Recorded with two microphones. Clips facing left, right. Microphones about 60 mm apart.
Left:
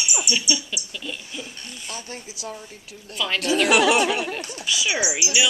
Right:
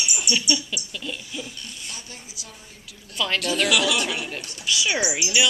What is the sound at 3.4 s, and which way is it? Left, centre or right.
Speech, left.